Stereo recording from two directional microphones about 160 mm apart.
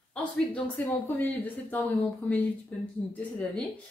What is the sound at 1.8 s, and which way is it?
Speech, centre (ahead or behind).